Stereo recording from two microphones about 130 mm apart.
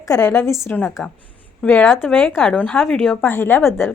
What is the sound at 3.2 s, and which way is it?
Speech, 20° left (ahead or behind).